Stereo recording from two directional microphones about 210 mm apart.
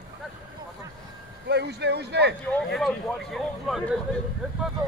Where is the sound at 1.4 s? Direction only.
55° right (ahead or behind).